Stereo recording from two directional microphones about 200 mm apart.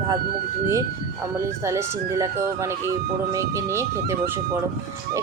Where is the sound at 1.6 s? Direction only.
15° right (ahead or behind).